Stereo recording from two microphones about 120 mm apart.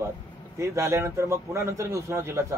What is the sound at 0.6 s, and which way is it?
Speech, 25° right (ahead or behind).